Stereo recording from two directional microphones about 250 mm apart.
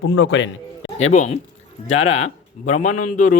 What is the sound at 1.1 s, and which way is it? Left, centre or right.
Speech, left.